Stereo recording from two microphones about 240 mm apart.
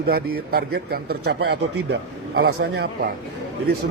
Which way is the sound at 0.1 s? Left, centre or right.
Right.